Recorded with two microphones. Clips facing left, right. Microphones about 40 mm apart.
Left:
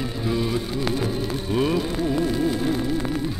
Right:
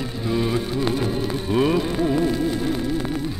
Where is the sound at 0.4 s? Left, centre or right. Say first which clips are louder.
Right 2 dB; centre.